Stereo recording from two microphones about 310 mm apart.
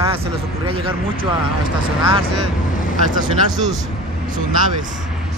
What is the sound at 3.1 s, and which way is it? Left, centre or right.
Speech, centre.